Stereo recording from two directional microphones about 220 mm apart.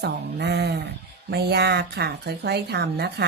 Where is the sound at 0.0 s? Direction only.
50° right (ahead or behind).